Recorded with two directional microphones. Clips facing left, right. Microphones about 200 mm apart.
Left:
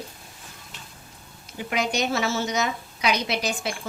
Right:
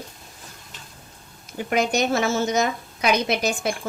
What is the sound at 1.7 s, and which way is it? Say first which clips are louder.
A woman's voice: right 4 dB; 50° right (ahead or behind).